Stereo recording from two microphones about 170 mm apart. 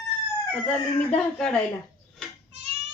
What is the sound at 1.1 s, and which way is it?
Speech, 5° left (ahead or behind).